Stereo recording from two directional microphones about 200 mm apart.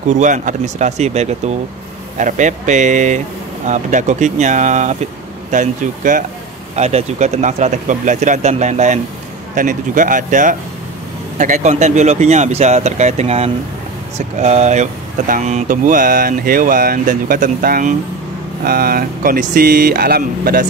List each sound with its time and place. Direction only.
0.1 s speech: 40° right (ahead or behind)